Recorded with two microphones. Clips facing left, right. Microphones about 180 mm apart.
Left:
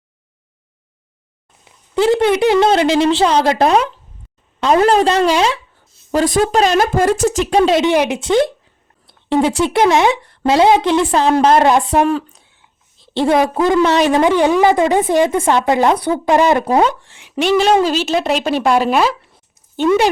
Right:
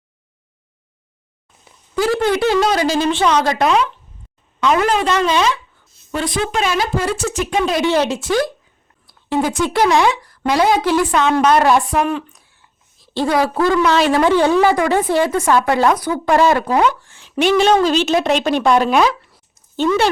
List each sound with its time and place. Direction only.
2.0 s a woman's voice: 20° left (ahead or behind); by 7.3 s 50° left (ahead or behind)
7.7 s a woman's voice: 20° left (ahead or behind)
17.4 s speech: centre (ahead or behind)
19.7 s speech: 15° left (ahead or behind)